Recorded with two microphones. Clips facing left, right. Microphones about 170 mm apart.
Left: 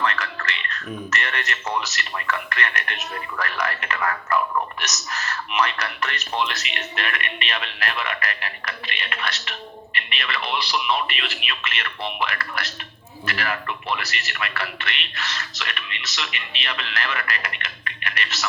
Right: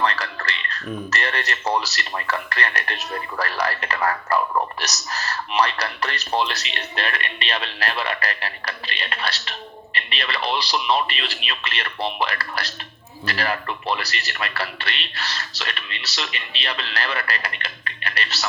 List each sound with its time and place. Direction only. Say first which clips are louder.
0.0 s speech: right 2 dB; 35° right (ahead or behind)